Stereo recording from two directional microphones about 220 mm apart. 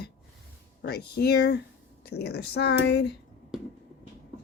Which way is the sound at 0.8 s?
45° left (ahead or behind).